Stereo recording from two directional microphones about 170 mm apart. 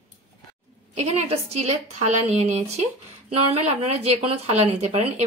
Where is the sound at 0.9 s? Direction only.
40° right (ahead or behind).